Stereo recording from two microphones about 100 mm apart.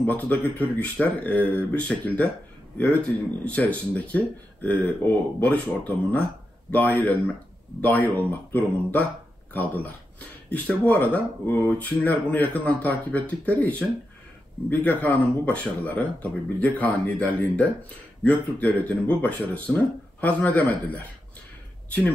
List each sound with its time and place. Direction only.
0.0 s speech: 15° left (ahead or behind)